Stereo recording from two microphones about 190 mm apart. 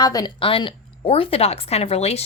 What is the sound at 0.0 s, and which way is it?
Speech, 20° left (ahead or behind).